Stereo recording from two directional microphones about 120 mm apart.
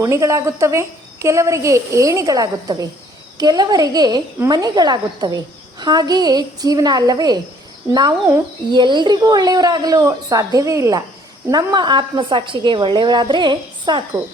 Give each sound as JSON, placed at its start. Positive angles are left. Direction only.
{"t": 0.0, "sound": "a woman's voice", "side_deg": -25}
{"t": 11.5, "sound": "a woman's voice", "side_deg": -35}